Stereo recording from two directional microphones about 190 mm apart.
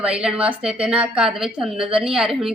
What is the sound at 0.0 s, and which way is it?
A woman's voice, 5° right (ahead or behind).